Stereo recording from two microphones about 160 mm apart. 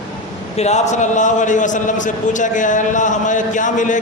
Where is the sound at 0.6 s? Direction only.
45° left (ahead or behind).